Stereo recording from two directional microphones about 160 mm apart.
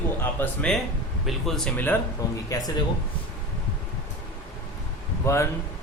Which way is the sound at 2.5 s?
25° left (ahead or behind).